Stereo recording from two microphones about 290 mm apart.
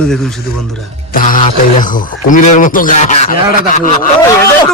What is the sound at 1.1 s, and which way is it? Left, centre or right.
Speech, left.